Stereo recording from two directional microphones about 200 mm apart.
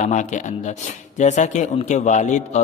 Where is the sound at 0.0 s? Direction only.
35° left (ahead or behind).